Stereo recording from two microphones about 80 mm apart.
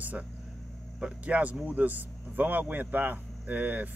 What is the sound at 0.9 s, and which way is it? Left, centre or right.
Speech, centre.